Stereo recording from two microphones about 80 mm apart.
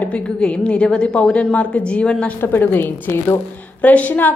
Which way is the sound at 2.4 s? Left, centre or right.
Left.